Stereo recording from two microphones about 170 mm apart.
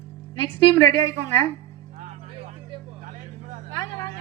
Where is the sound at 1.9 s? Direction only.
45° right (ahead or behind).